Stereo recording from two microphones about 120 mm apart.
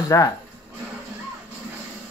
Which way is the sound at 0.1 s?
25° left (ahead or behind).